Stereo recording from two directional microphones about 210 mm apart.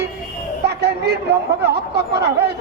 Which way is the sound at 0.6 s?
50° right (ahead or behind).